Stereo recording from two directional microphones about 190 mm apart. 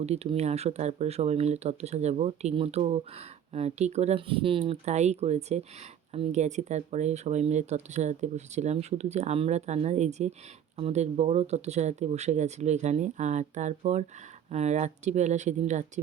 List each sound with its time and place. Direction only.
0.0 s speech: 35° right (ahead or behind)